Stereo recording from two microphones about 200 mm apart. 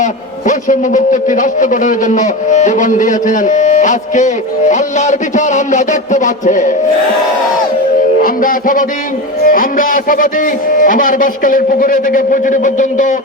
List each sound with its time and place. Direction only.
0.0 s a man's voice: 40° left (ahead or behind)
8.2 s a man's voice: 45° left (ahead or behind)